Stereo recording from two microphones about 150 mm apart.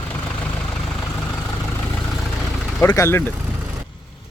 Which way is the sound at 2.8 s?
20° left (ahead or behind).